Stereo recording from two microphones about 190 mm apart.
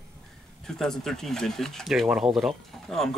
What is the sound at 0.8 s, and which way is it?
Speech, 5° left (ahead or behind).